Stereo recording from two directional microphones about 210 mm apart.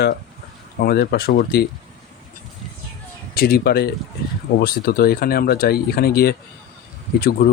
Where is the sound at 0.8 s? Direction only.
45° left (ahead or behind).